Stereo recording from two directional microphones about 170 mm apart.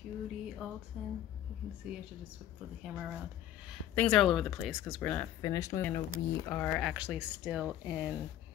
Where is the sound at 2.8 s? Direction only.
5° right (ahead or behind); by 5.3 s 10° left (ahead or behind).